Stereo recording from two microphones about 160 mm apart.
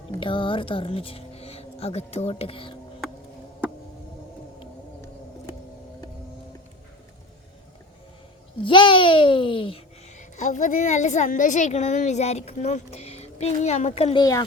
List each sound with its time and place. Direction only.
0.2 s speech: 30° left (ahead or behind)
8.6 s a child's voice: 30° left (ahead or behind)
10.2 s a woman's voice: 50° left (ahead or behind)
14.2 s speech: 20° left (ahead or behind)